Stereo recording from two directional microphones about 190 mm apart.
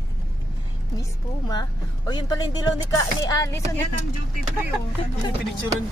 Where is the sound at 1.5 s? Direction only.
20° left (ahead or behind).